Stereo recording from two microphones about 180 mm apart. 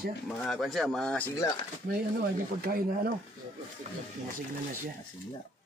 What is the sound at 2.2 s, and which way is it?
Speech, 55° right (ahead or behind).